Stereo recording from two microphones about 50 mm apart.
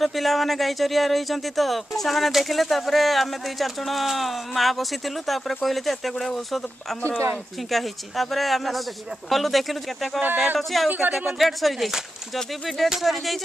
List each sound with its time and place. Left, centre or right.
0.0 s speech: centre
7.0 s speech: left
7.7 s speech: centre
10.9 s speech: right
11.3 s speech: centre